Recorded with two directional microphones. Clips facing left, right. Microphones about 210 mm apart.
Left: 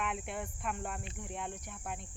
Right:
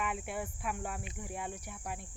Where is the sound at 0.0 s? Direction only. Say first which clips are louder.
Right 1 dB; 5° right (ahead or behind).